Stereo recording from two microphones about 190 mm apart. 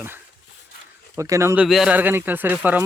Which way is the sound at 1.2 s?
15° right (ahead or behind).